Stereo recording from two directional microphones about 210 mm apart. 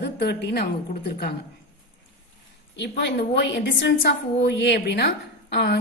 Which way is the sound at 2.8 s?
55° left (ahead or behind).